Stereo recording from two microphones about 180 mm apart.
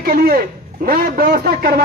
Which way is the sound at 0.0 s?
55° right (ahead or behind).